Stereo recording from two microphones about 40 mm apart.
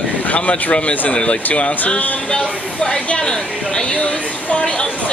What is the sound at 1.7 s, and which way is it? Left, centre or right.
Music, left.